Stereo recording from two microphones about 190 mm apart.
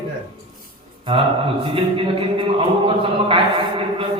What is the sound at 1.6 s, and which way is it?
A man's voice, 30° right (ahead or behind).